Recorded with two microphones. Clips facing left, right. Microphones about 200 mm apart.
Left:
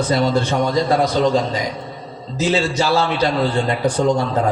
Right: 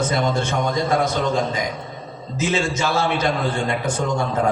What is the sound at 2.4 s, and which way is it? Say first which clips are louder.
Speech: left 4 dB; 35° left (ahead or behind).